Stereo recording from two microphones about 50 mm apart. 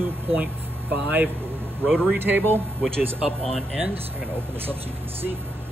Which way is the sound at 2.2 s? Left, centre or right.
Right.